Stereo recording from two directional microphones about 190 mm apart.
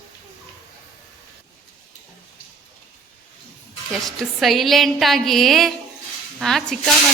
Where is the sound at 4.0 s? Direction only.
Centre (ahead or behind).